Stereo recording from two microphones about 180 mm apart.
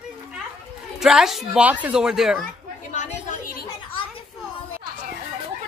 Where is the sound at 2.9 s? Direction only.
45° left (ahead or behind).